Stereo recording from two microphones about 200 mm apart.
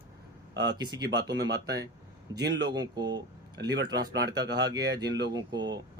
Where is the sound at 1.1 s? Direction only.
60° right (ahead or behind).